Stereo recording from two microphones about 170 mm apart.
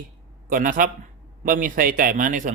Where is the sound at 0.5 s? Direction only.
55° right (ahead or behind).